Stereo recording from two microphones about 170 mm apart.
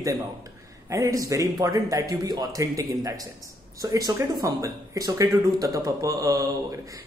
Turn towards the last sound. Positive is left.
turn(degrees=-20)  # may be behind; listen again after turning